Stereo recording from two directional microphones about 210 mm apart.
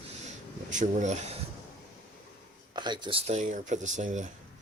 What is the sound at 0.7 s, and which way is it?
Speech, 35° right (ahead or behind).